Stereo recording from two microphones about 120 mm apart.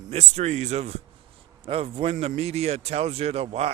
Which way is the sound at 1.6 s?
55° right (ahead or behind).